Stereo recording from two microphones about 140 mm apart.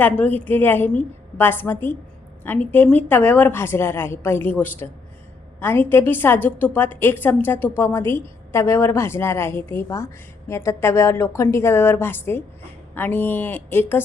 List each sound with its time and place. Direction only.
0.0 s a woman's voice: 10° left (ahead or behind)